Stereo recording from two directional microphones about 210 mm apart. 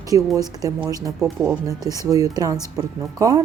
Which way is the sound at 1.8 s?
15° right (ahead or behind).